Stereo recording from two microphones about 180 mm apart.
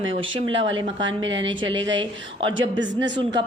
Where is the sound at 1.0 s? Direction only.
90° right.